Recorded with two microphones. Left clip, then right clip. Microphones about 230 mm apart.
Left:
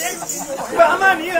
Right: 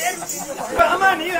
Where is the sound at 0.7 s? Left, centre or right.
Centre.